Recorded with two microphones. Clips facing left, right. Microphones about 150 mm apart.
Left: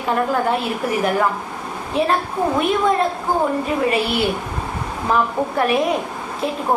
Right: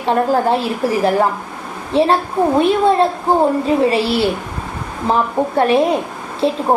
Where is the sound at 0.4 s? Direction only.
30° right (ahead or behind).